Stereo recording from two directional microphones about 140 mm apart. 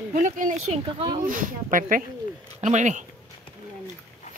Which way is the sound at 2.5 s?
60° right (ahead or behind).